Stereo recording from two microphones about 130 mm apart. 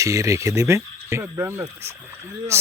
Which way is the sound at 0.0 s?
25° right (ahead or behind).